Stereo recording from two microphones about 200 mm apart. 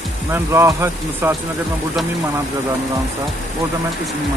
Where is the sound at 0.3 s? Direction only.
15° right (ahead or behind).